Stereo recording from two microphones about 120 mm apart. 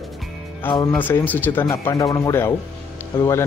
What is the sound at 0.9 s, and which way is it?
Speech, 15° left (ahead or behind).